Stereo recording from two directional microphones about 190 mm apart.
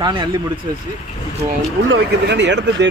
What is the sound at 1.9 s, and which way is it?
Speech, 65° right (ahead or behind).